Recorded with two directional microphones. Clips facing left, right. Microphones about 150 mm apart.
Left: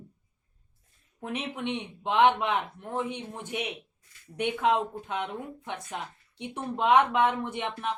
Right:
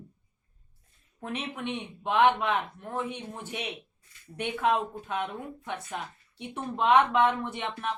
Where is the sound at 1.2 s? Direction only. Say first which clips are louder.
Left 1 dB; 15° left (ahead or behind).